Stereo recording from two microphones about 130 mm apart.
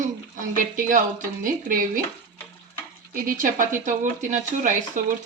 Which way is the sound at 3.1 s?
90° right.